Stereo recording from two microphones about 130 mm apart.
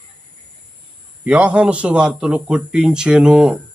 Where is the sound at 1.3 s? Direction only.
10° right (ahead or behind).